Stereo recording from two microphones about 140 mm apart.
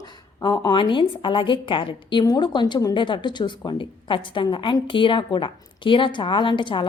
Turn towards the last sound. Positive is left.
turn(degrees=35)  # may be behind; listen again after turning